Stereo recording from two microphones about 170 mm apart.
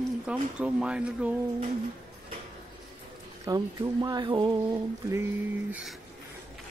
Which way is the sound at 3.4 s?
20° right (ahead or behind).